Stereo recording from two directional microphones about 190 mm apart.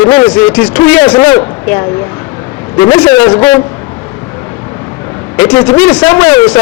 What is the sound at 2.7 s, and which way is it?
Speech, 25° left (ahead or behind).